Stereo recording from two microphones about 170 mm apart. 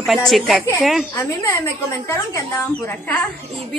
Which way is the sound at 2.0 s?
15° left (ahead or behind).